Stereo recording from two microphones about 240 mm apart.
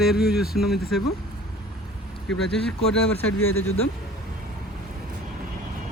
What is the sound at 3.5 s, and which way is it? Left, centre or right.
Speech, left.